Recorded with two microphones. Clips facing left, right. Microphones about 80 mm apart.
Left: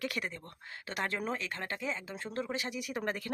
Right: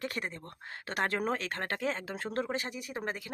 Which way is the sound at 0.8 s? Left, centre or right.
Right.